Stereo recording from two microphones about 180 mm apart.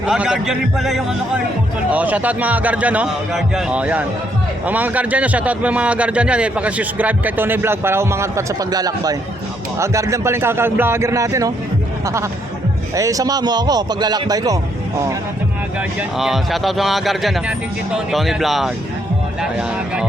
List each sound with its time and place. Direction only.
0.0 s a man's voice: 5° right (ahead or behind)
12.9 s speech: 20° right (ahead or behind)
16.0 s speech: centre (ahead or behind)